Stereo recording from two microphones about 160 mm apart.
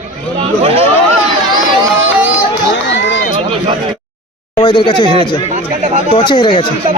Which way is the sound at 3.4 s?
35° right (ahead or behind).